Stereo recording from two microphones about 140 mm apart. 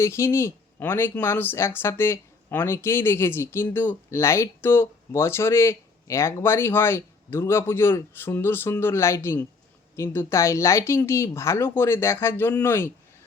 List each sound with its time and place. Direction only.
0.0 s speech: 20° left (ahead or behind)